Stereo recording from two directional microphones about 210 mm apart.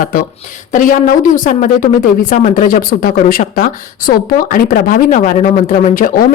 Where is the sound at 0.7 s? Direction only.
35° left (ahead or behind).